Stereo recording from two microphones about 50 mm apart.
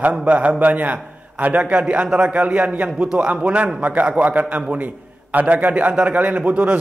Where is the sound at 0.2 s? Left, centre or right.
Right.